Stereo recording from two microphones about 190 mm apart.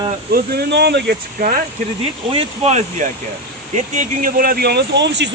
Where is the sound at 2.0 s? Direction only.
30° right (ahead or behind).